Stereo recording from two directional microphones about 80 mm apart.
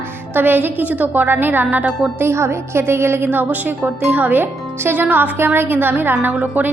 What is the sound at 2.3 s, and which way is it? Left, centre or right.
A woman's voice, right.